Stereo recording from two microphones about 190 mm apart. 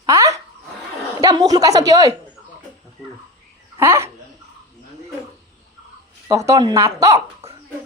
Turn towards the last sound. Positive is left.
turn(degrees=-15)  # may be behind; listen again after turning